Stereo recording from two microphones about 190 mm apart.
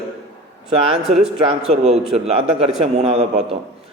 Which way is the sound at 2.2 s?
30° right (ahead or behind).